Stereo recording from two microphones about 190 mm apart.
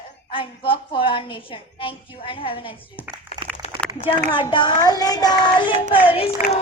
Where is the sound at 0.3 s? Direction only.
30° left (ahead or behind).